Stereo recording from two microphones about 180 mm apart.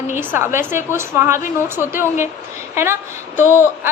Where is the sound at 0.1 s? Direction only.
10° right (ahead or behind).